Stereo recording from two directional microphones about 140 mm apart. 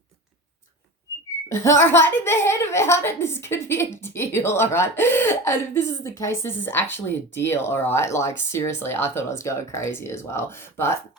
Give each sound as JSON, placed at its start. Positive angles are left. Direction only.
{"t": 1.5, "sound": "a woman's voice", "side_deg": 20}